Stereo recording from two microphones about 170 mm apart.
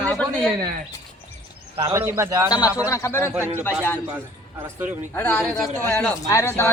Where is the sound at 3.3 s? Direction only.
15° right (ahead or behind).